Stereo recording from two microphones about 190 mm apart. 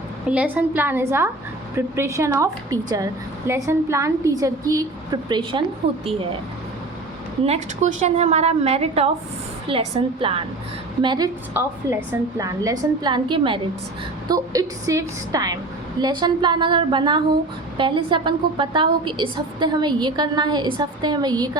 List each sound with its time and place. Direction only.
0.3 s a woman's voice: 10° right (ahead or behind); by 6.4 s 30° right (ahead or behind)
7.4 s a woman's voice: 35° right (ahead or behind)
11.6 s a woman's voice: 10° right (ahead or behind)